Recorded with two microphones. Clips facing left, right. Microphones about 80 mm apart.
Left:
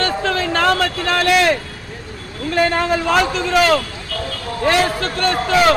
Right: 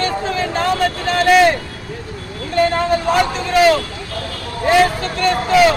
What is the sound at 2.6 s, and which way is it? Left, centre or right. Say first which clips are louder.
Speech: right 1 dB; left.